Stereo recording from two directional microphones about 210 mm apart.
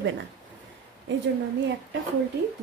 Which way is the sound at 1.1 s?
60° right (ahead or behind).